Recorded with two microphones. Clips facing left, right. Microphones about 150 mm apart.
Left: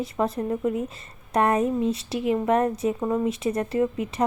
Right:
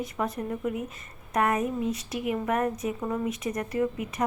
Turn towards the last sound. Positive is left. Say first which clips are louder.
# left 4 dB
turn(degrees=30)  # may be behind; listen again after turning